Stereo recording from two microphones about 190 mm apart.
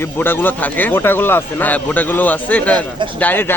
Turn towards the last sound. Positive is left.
turn(degrees=10)  # may be behind; listen again after turning